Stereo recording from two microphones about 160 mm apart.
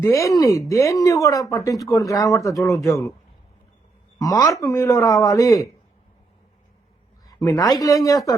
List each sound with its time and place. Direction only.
0.0 s speech: 20° left (ahead or behind)
4.2 s speech: 20° left (ahead or behind)
7.3 s a woman's voice: 20° left (ahead or behind)